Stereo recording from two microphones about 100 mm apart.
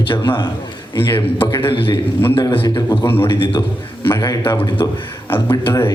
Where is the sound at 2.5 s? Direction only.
55° left (ahead or behind).